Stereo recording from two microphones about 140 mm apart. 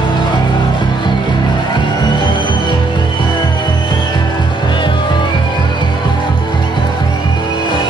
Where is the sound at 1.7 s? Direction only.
35° left (ahead or behind).